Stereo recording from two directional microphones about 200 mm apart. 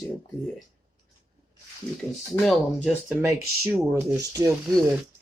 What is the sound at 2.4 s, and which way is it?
Speech, centre (ahead or behind).